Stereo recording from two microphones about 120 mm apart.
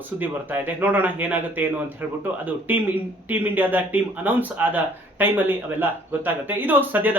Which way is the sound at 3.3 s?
15° right (ahead or behind).